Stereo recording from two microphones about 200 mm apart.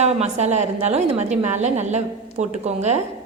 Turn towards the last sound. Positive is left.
turn(degrees=-35)  # may be behind; listen again after turning